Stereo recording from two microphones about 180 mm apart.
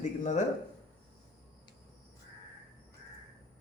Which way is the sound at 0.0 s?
40° left (ahead or behind).